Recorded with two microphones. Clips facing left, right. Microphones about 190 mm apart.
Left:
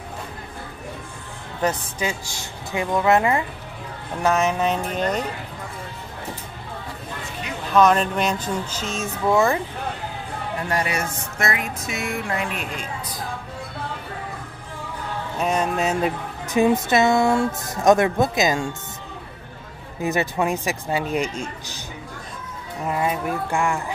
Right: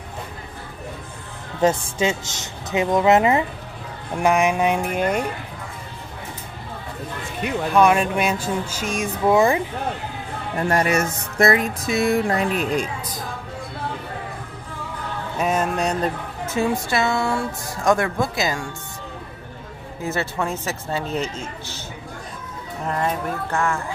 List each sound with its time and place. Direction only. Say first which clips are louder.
1.6 s speech: right 5 dB; 25° right (ahead or behind)
7.7 s speech: even; 10° right (ahead or behind)
10.7 s speech: right 5 dB; 45° right (ahead or behind)
15.3 s music: right 1 dB; 5° right (ahead or behind)
16.4 s a woman's voice: left 4 dB; 15° left (ahead or behind)
20.0 s speech: left 3 dB; 15° left (ahead or behind)
22.8 s speech: left 1 dB; 5° left (ahead or behind)